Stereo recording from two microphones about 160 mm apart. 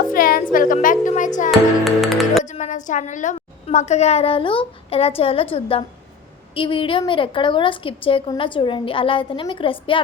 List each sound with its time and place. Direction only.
0.1 s a sound: 65° left (ahead or behind)
1.5 s music: centre (ahead or behind)
2.4 s a woman's voice: 50° left (ahead or behind); by 10.0 s 35° left (ahead or behind)